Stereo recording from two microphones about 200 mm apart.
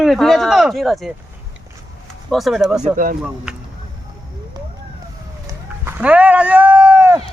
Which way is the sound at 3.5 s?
5° right (ahead or behind).